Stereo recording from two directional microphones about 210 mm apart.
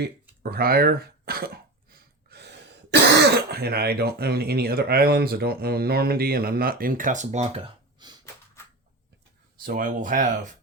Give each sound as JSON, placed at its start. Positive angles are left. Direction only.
{"t": 0.0, "sound": "throat clearing", "side_deg": -45}
{"t": 2.9, "sound": "speech", "side_deg": -50}
{"t": 9.6, "sound": "speech", "side_deg": -40}